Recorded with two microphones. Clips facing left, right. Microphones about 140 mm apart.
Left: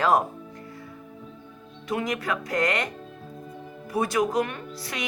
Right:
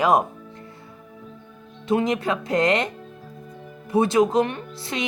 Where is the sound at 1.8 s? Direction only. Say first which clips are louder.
Right 6 dB; 25° right (ahead or behind).